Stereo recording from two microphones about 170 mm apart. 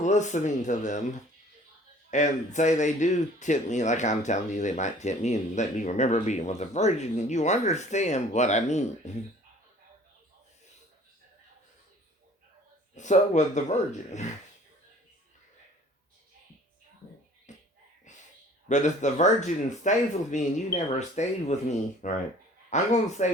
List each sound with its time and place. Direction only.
0.0 s speech: 45° left (ahead or behind)
2.0 s speech: 45° left (ahead or behind)
13.0 s speech: 45° left (ahead or behind)
17.5 s a sound: 45° left (ahead or behind)
18.7 s speech: 45° left (ahead or behind)